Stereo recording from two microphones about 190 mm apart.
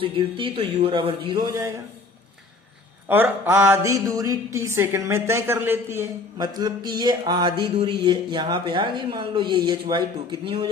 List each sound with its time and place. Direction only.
0.0 s a woman's voice: 30° right (ahead or behind)
3.1 s a woman's voice: 10° right (ahead or behind)